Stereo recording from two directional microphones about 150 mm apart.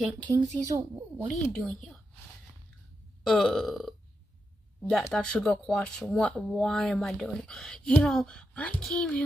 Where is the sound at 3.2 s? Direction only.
5° left (ahead or behind).